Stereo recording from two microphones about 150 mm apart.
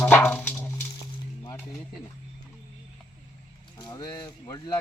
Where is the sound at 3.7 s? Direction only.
25° left (ahead or behind).